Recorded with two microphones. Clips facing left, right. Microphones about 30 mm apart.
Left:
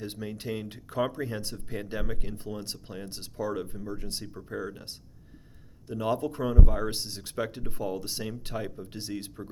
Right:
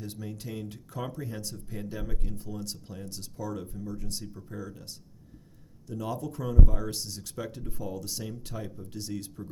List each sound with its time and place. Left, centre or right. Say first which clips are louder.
0.0 s speech: left 4 dB; left